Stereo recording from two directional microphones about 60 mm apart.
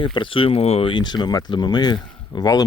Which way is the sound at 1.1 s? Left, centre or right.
Left.